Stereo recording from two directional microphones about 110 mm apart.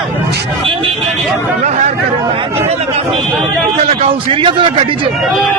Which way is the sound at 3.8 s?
60° right (ahead or behind).